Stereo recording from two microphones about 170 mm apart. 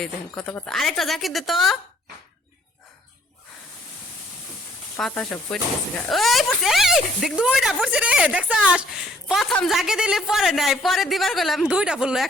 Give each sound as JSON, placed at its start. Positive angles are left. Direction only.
{"t": 0.0, "sound": "speech", "side_deg": 5}
{"t": 4.9, "sound": "speech", "side_deg": 5}